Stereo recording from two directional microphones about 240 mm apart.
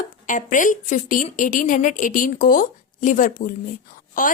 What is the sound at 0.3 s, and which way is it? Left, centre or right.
A woman's voice, left.